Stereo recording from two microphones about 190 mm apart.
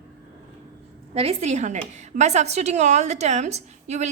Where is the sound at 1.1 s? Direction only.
30° right (ahead or behind).